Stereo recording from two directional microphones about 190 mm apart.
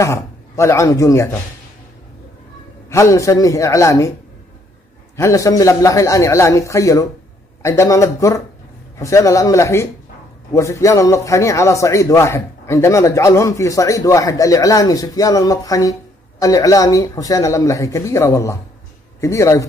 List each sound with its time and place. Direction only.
0.0 s speech: 15° left (ahead or behind)
2.9 s a man's voice: 15° left (ahead or behind)
5.1 s a man's voice: 15° left (ahead or behind)